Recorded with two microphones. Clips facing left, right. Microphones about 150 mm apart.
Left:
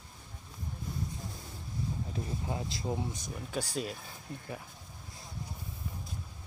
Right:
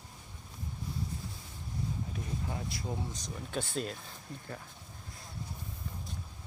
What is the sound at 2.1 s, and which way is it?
Speech, 25° left (ahead or behind).